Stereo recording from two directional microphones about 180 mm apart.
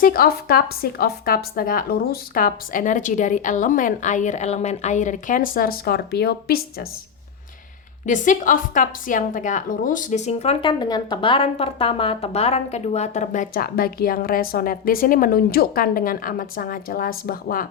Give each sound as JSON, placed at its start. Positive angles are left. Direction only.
{"t": 0.0, "sound": "a woman's voice", "side_deg": 55}
{"t": 8.0, "sound": "a woman's voice", "side_deg": 45}